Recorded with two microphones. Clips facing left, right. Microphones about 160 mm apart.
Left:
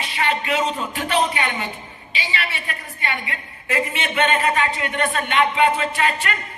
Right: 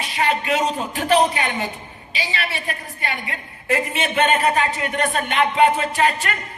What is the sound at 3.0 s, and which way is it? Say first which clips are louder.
A man's voice: left 1 dB; 45° right (ahead or behind).